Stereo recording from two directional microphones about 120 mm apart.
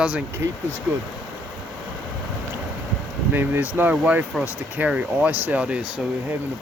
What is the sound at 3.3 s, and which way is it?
Speech, 15° right (ahead or behind).